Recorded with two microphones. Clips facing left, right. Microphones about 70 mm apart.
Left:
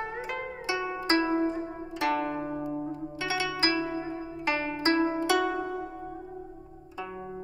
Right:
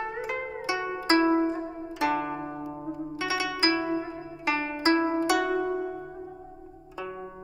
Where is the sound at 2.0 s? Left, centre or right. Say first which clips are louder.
Right 1 dB; centre.